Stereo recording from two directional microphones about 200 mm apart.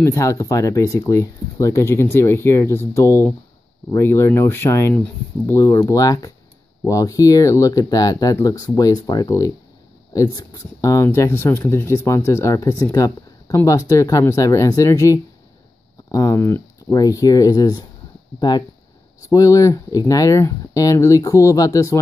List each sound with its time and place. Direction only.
0.0 s speech: 15° left (ahead or behind)